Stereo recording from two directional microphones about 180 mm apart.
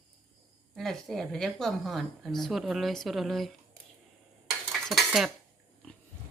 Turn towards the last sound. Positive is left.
turn(degrees=0)  # may be behind; listen again after turning